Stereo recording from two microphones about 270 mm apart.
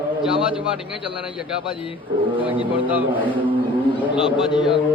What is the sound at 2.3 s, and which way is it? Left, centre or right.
Speech, centre.